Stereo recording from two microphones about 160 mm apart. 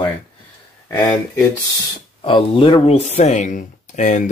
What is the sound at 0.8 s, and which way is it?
Speech, 15° left (ahead or behind).